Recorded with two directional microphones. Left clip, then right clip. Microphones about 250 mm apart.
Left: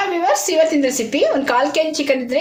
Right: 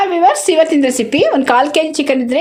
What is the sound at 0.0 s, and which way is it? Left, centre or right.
A woman's voice, right.